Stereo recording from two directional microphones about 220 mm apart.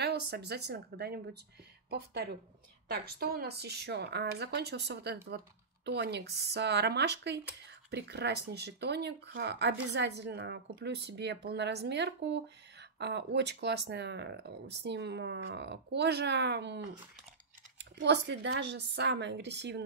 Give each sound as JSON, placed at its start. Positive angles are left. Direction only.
{"t": 0.0, "sound": "speech", "side_deg": -45}